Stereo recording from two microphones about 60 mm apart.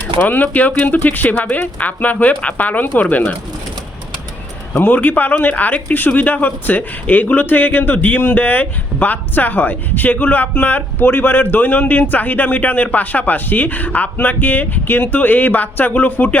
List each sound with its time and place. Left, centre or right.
0.2 s speech: left
4.7 s speech: left